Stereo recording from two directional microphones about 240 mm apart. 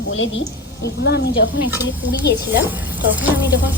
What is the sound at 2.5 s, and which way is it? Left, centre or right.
Speech, centre.